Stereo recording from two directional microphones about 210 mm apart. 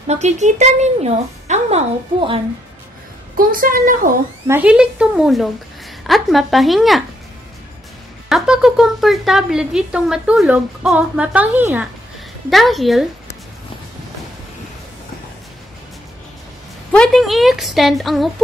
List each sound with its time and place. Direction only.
0.0 s a woman's voice: 30° right (ahead or behind)
3.3 s a woman's voice: 45° right (ahead or behind)
4.5 s speech: 5° right (ahead or behind)
8.3 s speech: centre (ahead or behind)
16.9 s speech: centre (ahead or behind)